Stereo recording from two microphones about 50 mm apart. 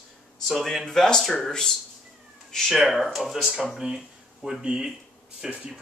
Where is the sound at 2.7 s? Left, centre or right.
Centre.